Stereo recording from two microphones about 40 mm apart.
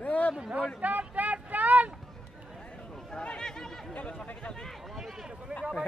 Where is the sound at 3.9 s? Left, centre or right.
Left.